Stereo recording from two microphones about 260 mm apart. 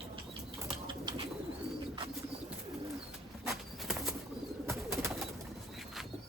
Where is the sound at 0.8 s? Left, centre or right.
Centre.